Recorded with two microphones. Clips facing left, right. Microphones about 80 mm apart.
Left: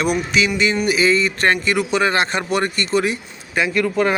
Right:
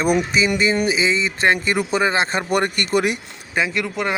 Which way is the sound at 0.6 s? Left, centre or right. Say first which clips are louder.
Even; right.